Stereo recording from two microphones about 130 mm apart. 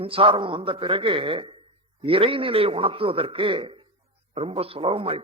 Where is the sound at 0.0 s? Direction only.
45° right (ahead or behind).